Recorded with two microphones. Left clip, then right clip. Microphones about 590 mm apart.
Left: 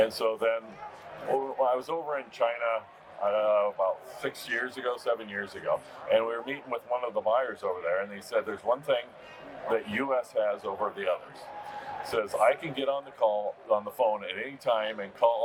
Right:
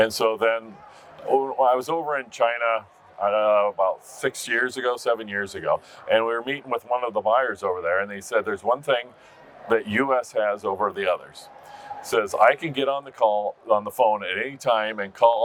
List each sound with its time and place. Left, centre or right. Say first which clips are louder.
0.0 s a man's voice: right 6 dB; right